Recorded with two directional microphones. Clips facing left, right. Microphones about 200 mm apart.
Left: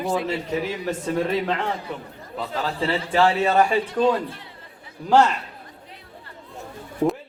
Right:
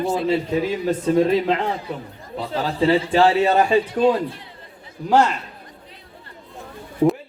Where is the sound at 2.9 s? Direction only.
20° right (ahead or behind).